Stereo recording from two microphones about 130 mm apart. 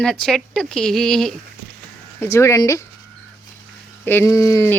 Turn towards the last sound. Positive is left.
turn(degrees=20)  # may be behind; listen again after turning